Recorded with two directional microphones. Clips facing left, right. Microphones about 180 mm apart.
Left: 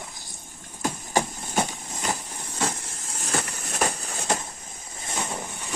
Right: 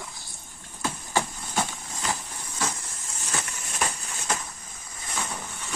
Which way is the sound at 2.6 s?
30° left (ahead or behind).